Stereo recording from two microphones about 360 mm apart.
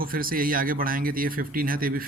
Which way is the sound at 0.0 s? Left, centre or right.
Right.